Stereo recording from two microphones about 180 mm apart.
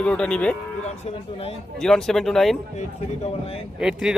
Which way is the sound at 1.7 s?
Centre (ahead or behind).